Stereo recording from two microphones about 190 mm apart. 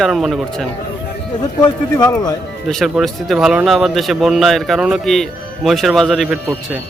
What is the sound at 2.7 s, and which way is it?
Speech, centre (ahead or behind).